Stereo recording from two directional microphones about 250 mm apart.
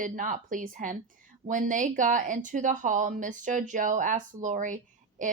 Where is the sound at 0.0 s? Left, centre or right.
Right.